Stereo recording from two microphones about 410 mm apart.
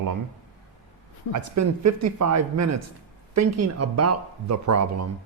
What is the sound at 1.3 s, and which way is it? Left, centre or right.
Speech, right.